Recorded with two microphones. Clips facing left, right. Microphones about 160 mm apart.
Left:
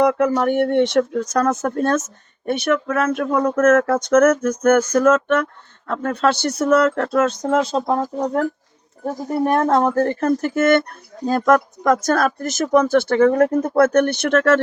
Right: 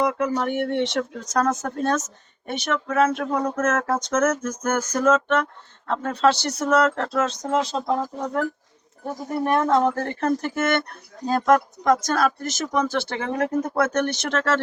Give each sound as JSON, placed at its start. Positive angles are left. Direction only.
{"t": 0.0, "sound": "speech", "side_deg": 60}
{"t": 9.5, "sound": "speech", "side_deg": 45}